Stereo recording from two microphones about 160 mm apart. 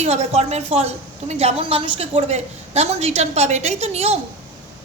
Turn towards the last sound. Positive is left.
turn(degrees=-40)  # may be behind; listen again after turning